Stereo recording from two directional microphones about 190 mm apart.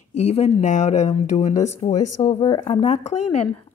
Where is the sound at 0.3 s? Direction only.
35° left (ahead or behind).